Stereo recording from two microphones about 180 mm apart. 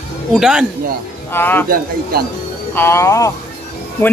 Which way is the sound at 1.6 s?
55° right (ahead or behind).